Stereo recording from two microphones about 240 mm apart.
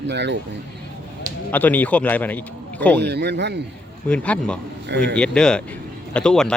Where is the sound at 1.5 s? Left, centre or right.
Centre.